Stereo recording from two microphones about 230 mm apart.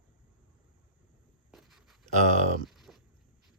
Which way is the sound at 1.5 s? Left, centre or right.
Centre.